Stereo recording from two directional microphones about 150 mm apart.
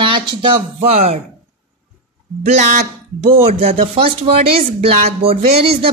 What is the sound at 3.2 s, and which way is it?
Speech, 40° right (ahead or behind).